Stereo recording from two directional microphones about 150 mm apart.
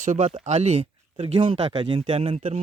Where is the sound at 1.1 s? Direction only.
35° right (ahead or behind).